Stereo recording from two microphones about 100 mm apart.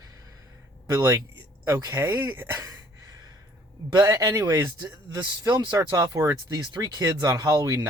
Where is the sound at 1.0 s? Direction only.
30° right (ahead or behind).